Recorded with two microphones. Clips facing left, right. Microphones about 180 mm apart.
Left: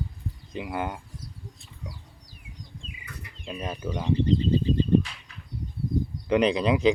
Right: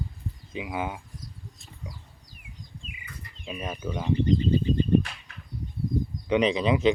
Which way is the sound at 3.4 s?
5° right (ahead or behind).